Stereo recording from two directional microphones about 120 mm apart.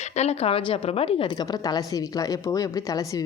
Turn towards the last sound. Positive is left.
turn(degrees=30)  # may be behind; listen again after turning